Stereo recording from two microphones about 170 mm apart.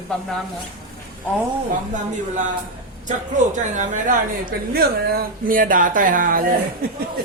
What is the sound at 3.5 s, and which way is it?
Speech, 45° right (ahead or behind).